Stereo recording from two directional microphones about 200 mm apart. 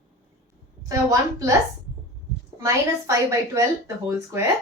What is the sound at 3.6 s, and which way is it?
Speech, 15° right (ahead or behind).